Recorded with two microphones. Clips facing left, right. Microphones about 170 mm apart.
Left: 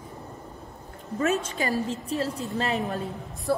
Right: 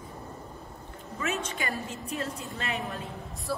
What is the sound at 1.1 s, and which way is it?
A woman's voice, 40° left (ahead or behind).